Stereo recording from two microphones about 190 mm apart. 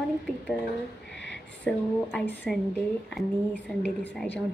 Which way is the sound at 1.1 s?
65° left (ahead or behind).